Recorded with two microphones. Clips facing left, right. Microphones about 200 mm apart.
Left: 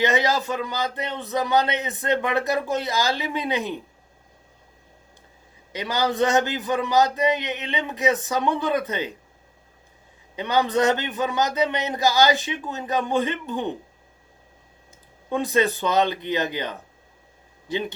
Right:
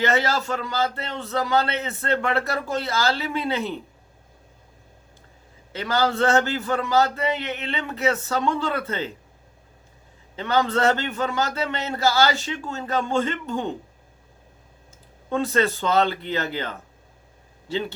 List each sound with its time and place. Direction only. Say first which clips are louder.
0.0 s a man's voice: left 1 dB; 15° left (ahead or behind)
5.7 s a man's voice: right 1 dB; 15° left (ahead or behind)
10.3 s a man's voice: left 1 dB; 15° left (ahead or behind)
15.3 s a man's voice: even; 15° left (ahead or behind)